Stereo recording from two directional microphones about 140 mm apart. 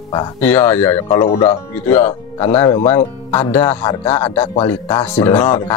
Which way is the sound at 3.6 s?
30° left (ahead or behind).